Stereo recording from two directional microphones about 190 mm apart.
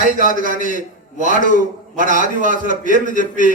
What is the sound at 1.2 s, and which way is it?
A man's voice, 45° right (ahead or behind).